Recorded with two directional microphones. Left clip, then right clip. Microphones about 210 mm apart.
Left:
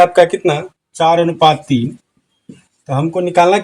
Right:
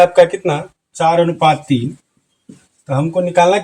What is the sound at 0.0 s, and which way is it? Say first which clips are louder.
Speech: even; 40° left (ahead or behind).